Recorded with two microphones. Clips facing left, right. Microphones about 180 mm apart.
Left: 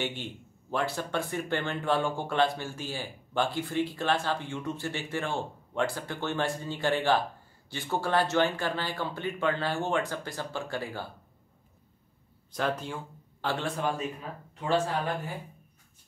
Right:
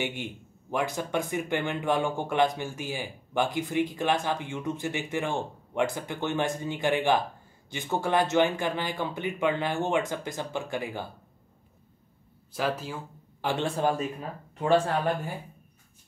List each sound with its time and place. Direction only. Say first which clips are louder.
0.0 s a man's voice: right 2 dB; 15° right (ahead or behind)
12.5 s speech: right 1 dB; 5° right (ahead or behind)
13.5 s a man's voice: right 4 dB; 25° right (ahead or behind)